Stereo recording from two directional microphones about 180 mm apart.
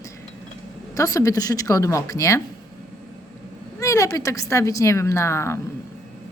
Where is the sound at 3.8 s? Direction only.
15° left (ahead or behind).